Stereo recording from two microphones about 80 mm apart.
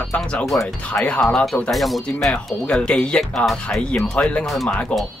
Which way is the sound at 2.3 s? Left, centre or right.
Centre.